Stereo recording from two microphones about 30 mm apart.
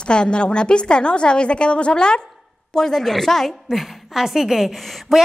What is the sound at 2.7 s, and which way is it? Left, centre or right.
A woman's voice, centre.